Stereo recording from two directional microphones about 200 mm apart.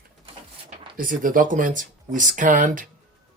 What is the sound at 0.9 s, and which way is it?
Speech, 45° right (ahead or behind).